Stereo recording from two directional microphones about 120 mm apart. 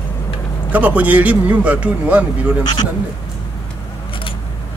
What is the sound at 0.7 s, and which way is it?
Speech, 15° right (ahead or behind).